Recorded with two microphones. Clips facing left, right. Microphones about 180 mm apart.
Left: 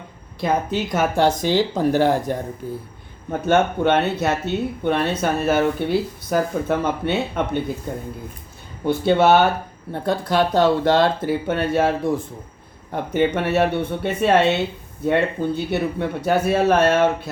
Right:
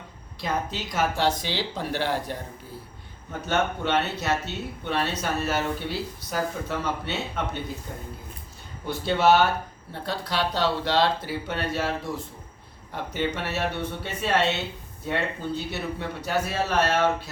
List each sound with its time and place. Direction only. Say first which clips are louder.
0.3 s speech: left 8 dB; 55° left (ahead or behind)
3.4 s speech: left 8 dB; 55° left (ahead or behind)
8.8 s speech: left 7 dB; 55° left (ahead or behind)